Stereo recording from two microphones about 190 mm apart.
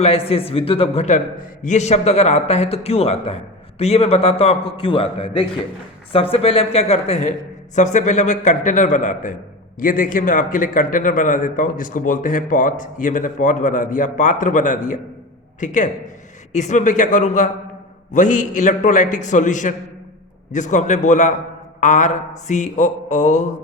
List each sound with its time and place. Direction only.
0.0 s a man's voice: 30° left (ahead or behind)